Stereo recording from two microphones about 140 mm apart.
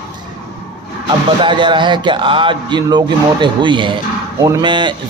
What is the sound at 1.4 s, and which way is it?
A man's voice, 35° right (ahead or behind).